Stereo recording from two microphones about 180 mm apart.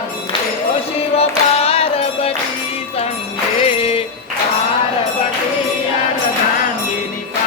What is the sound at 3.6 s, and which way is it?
Music, 35° left (ahead or behind).